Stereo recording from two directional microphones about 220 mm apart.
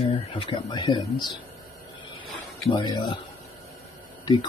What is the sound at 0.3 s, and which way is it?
Speech, 25° left (ahead or behind).